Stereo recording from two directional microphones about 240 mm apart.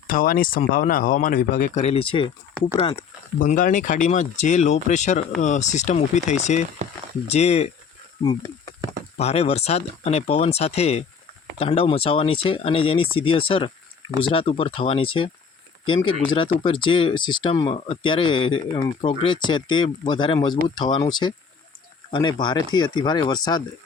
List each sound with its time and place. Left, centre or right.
0.1 s speech: left
2.6 s speech: centre
3.3 s speech: left
9.1 s speech: left